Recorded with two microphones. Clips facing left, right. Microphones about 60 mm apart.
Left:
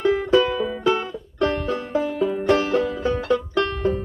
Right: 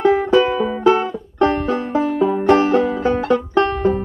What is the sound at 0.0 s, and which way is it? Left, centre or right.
Music, right.